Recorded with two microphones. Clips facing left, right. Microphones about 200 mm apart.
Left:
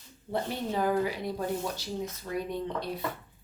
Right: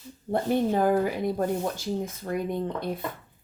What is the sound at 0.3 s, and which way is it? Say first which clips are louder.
Speech: right 8 dB; 50° right (ahead or behind).